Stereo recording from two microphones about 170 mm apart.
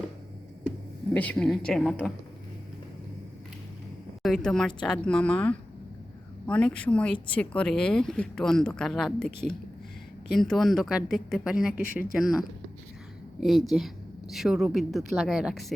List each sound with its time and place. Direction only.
1.1 s speech: 10° left (ahead or behind)
4.2 s speech: centre (ahead or behind)
11.8 s speech: 55° left (ahead or behind)
12.1 s speech: centre (ahead or behind)